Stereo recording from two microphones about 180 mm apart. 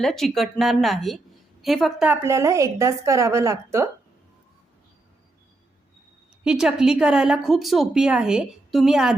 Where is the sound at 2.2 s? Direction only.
15° right (ahead or behind).